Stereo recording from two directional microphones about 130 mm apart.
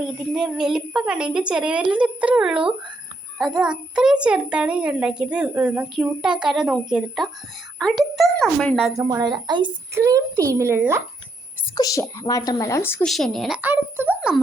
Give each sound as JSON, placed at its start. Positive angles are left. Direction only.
{"t": 0.0, "sound": "a child's voice", "side_deg": -5}
{"t": 9.0, "sound": "a woman's voice", "side_deg": -25}
{"t": 9.9, "sound": "a child's voice", "side_deg": -25}
{"t": 11.7, "sound": "a woman's voice", "side_deg": 30}
{"t": 13.1, "sound": "speech", "side_deg": 0}
{"t": 13.6, "sound": "a child's voice", "side_deg": -15}
{"t": 14.2, "sound": "a sound", "side_deg": 0}